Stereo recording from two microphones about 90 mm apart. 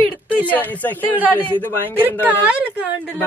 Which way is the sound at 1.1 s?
20° right (ahead or behind).